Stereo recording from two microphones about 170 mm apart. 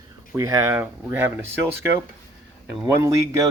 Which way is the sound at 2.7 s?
20° right (ahead or behind).